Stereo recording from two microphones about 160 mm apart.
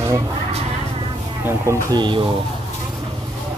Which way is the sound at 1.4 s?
15° right (ahead or behind).